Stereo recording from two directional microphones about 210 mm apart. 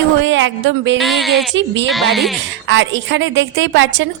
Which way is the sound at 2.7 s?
65° right (ahead or behind).